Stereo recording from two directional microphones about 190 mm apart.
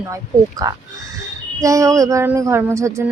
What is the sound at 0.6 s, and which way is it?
Speech, 20° right (ahead or behind).